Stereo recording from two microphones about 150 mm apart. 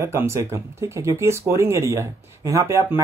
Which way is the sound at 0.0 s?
20° right (ahead or behind).